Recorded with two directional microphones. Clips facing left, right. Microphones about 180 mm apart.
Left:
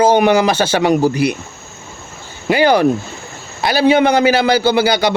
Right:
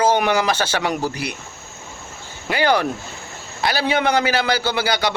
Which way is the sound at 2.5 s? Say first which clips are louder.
Left 7 dB; 15° left (ahead or behind).